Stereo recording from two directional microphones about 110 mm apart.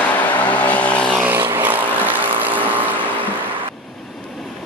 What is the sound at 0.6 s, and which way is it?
Vehicle, 15° left (ahead or behind).